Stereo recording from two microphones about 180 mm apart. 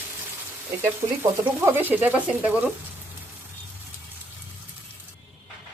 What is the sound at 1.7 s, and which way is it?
Speech, 10° right (ahead or behind).